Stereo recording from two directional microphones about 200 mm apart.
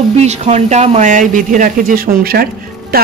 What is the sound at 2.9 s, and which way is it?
Music, 50° right (ahead or behind).